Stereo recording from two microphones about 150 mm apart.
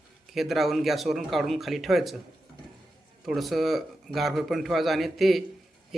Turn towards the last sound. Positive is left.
turn(degrees=0)  # may be behind; listen again after turning